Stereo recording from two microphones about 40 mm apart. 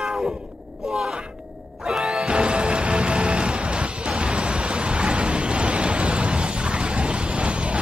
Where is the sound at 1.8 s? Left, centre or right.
Right.